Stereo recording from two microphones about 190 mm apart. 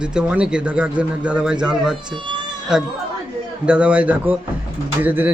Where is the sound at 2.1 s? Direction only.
25° right (ahead or behind).